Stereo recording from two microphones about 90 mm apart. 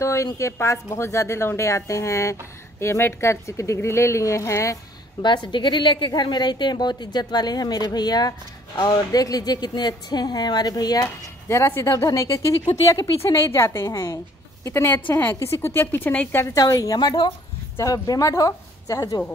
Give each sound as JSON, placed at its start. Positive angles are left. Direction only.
{"t": 0.0, "sound": "speech", "side_deg": 35}
{"t": 5.2, "sound": "a woman's voice", "side_deg": 60}
{"t": 11.4, "sound": "a woman's voice", "side_deg": 30}
{"t": 16.5, "sound": "a woman's voice", "side_deg": 40}